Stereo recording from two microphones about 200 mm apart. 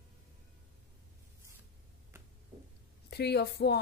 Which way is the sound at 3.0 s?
55° left (ahead or behind).